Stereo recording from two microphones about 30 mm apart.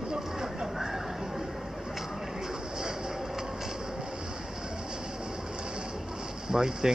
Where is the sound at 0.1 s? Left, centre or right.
Centre.